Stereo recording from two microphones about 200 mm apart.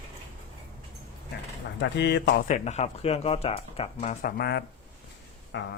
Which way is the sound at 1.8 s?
60° left (ahead or behind).